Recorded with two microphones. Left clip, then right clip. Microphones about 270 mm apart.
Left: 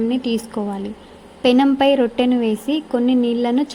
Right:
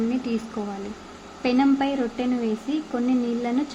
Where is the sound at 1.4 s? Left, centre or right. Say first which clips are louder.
Left 8 dB; left.